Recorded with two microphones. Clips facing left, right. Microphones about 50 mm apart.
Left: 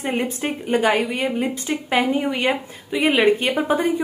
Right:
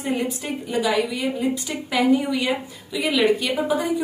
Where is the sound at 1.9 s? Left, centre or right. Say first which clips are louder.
Right 1 dB; left.